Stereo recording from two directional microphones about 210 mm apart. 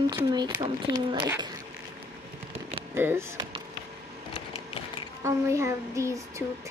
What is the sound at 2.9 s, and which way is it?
Speech, 10° right (ahead or behind).